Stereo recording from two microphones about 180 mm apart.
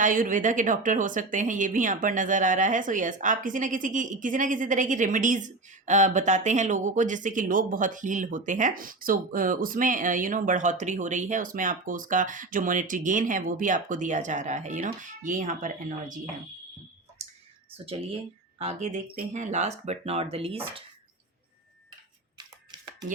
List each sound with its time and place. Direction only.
0.0 s a woman's voice: 45° right (ahead or behind)
17.8 s speech: 30° right (ahead or behind)
22.4 s a sound: 25° right (ahead or behind)